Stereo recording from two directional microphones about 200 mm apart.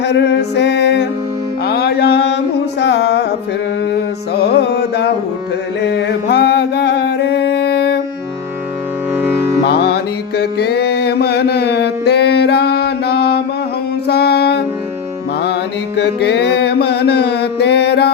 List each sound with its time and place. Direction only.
0.0 s music: 60° left (ahead or behind)
1.6 s mantra: 55° left (ahead or behind)
2.8 s music: 55° left (ahead or behind)
9.6 s music: 55° left (ahead or behind)
16.0 s a sound: 55° left (ahead or behind)